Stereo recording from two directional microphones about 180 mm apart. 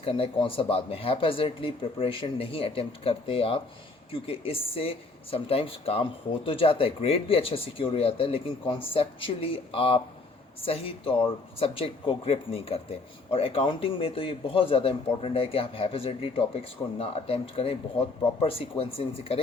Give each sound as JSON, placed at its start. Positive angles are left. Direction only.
{"t": 0.0, "sound": "speech", "side_deg": 30}